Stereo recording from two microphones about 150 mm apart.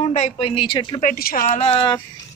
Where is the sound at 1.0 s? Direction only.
70° left (ahead or behind).